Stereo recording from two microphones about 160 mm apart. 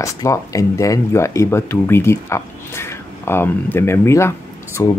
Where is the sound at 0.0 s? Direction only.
20° left (ahead or behind).